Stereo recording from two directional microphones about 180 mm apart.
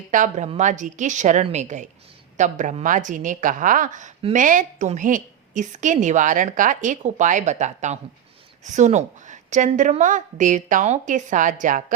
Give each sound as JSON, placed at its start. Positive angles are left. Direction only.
{"t": 0.1, "sound": "a woman's voice", "side_deg": -45}